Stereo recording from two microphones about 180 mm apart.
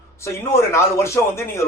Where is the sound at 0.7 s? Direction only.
15° left (ahead or behind).